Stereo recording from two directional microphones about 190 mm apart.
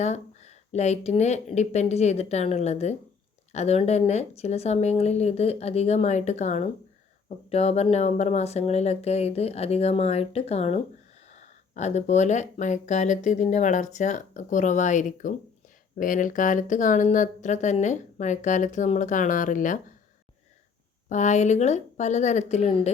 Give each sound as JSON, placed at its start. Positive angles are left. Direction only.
{"t": 0.0, "sound": "speech", "side_deg": 35}
{"t": 21.1, "sound": "speech", "side_deg": 40}